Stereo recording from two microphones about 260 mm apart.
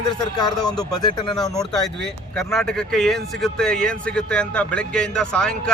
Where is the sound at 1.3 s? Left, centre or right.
Centre.